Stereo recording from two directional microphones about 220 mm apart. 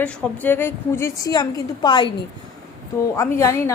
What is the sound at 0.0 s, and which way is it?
A woman's voice, 5° left (ahead or behind).